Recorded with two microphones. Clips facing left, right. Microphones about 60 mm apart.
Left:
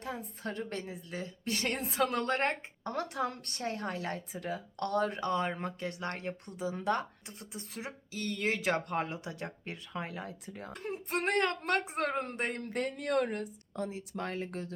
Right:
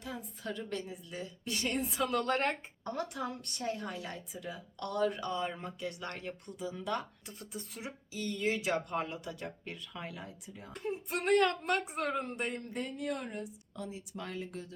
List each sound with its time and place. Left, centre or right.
0.0 s a woman's voice: left
2.8 s a woman's voice: left
8.1 s a woman's voice: left
11.1 s a woman's voice: left
12.2 s a woman's voice: left
12.7 s speech: left
13.4 s a woman's voice: left